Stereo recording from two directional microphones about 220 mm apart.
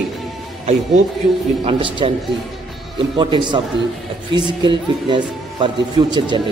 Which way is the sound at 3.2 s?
20° right (ahead or behind).